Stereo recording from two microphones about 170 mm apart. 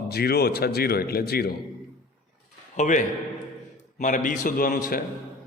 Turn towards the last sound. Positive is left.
turn(degrees=60)  # may be behind; listen again after turning